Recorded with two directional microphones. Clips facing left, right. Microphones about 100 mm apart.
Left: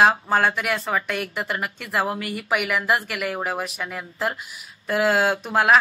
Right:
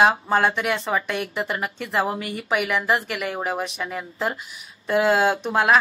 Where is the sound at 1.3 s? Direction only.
5° right (ahead or behind).